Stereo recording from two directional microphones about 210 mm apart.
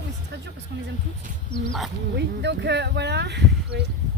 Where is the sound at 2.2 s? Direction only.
55° right (ahead or behind).